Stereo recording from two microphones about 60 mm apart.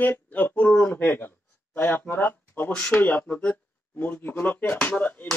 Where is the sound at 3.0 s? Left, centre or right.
Left.